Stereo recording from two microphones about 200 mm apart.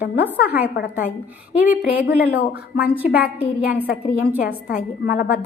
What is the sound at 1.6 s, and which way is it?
Speech, 10° right (ahead or behind).